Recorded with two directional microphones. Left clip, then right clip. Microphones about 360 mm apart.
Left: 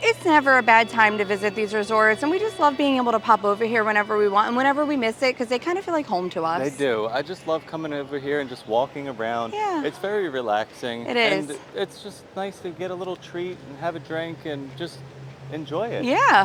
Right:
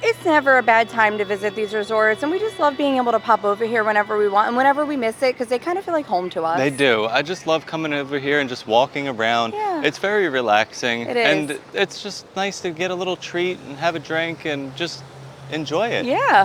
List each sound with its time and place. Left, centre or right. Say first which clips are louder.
0.0 s a woman's voice: right 1 dB; centre
6.6 s speech: right 6 dB; right
9.6 s a woman's voice: right 2 dB; centre
9.8 s speech: right 6 dB; right
11.1 s a woman's voice: right 2 dB; centre
11.4 s speech: right 7 dB; right
16.0 s a woman's voice: left 1 dB; centre